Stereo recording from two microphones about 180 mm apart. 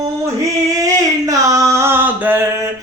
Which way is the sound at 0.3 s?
20° right (ahead or behind).